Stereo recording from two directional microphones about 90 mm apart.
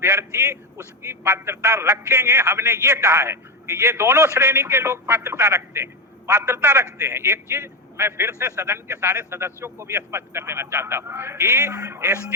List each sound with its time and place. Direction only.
0.0 s a man's voice: 30° right (ahead or behind)